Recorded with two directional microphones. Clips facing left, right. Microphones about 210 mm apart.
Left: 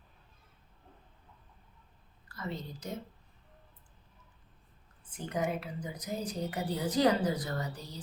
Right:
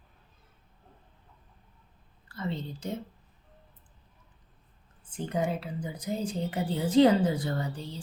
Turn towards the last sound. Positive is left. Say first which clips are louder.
# right 4 dB
turn(degrees=-30)  # may be behind; listen again after turning